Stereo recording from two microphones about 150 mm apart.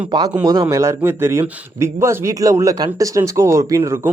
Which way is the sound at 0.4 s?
25° right (ahead or behind).